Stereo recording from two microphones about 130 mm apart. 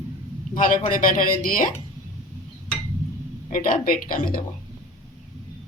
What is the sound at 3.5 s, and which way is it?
Speech, 90° left.